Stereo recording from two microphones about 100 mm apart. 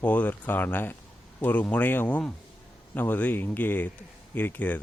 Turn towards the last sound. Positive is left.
turn(degrees=20)  # may be behind; listen again after turning